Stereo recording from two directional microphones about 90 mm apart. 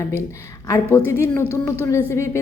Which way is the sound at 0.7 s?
35° left (ahead or behind).